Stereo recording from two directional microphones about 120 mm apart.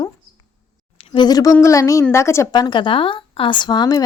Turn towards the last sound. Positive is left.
turn(degrees=35)  # may be behind; listen again after turning